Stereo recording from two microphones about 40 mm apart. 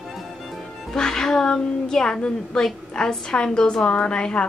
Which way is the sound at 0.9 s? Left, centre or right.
Centre.